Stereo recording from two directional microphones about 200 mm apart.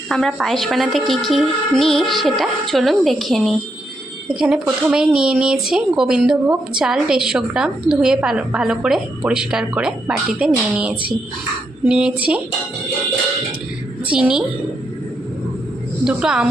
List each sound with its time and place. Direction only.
0.1 s speech: centre (ahead or behind)
11.9 s speech: 5° right (ahead or behind)
14.1 s speech: 5° right (ahead or behind)
16.0 s speech: 5° right (ahead or behind)